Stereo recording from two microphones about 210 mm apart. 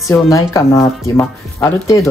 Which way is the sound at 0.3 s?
15° left (ahead or behind).